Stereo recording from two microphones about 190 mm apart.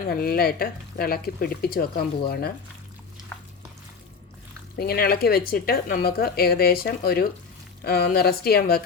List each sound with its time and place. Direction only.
0.1 s speech: 55° left (ahead or behind)
4.8 s a woman's voice: 55° left (ahead or behind)